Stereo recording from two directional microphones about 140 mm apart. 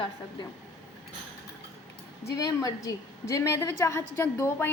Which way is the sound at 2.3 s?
25° left (ahead or behind).